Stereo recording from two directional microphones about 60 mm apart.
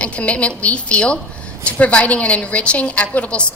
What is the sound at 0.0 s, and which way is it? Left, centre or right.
A woman's voice, left.